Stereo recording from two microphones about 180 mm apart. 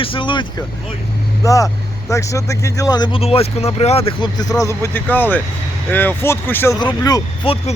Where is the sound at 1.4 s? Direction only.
20° left (ahead or behind).